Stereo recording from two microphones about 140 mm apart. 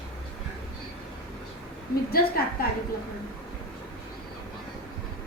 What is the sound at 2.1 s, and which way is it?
Speech, 90° left.